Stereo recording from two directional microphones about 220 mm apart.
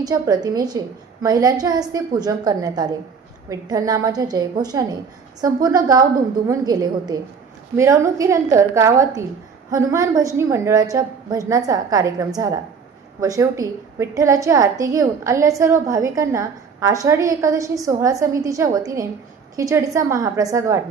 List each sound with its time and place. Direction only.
0.0 s a woman's voice: 15° right (ahead or behind)